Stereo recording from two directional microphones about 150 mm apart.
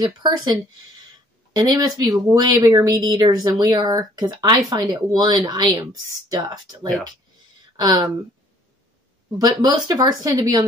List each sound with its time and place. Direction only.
0.0 s speech: 30° right (ahead or behind)
9.4 s speech: 30° right (ahead or behind)